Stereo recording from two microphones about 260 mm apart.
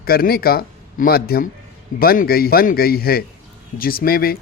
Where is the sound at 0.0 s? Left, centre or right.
Left.